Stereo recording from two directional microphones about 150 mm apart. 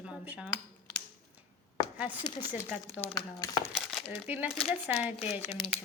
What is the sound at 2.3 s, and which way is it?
Speech, 30° left (ahead or behind).